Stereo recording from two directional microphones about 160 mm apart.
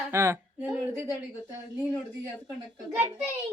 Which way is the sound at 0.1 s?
15° right (ahead or behind).